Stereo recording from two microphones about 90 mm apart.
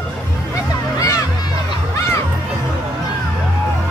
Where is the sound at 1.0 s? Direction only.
40° left (ahead or behind).